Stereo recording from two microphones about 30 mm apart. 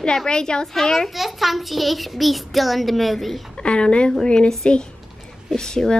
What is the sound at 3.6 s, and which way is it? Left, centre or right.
A child's voice, left.